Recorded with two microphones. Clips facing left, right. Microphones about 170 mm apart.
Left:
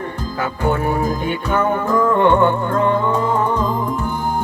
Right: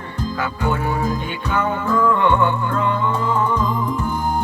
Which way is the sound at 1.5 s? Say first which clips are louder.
Left 2 dB; 50° left (ahead or behind).